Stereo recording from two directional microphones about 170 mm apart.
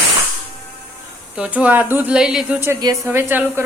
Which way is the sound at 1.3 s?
5° right (ahead or behind).